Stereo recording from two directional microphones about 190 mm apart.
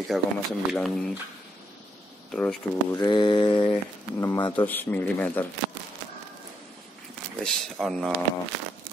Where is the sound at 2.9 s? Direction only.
20° left (ahead or behind).